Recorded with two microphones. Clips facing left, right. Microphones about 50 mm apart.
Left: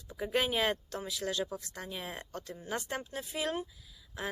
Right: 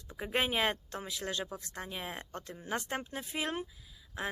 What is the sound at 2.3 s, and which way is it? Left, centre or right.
Speech, right.